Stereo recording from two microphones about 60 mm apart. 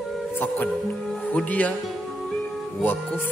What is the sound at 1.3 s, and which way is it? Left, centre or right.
Music, left.